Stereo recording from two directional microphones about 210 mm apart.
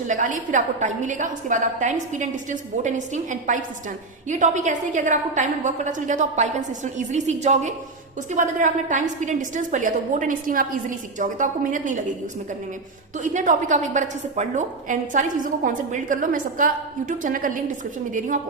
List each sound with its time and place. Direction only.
0.1 s a woman's voice: 35° right (ahead or behind)
13.1 s a woman's voice: 35° right (ahead or behind)